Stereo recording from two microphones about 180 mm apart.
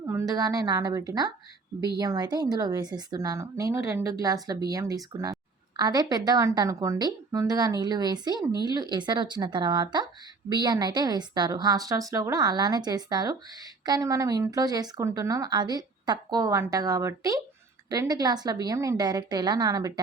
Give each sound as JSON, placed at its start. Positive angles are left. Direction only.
{"t": 0.0, "sound": "speech", "side_deg": -15}